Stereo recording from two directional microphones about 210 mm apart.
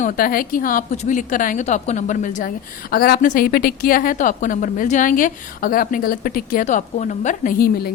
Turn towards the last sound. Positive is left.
turn(degrees=45)  # may be behind; listen again after turning